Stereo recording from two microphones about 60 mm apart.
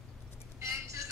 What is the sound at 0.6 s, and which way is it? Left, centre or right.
Vehicle, right.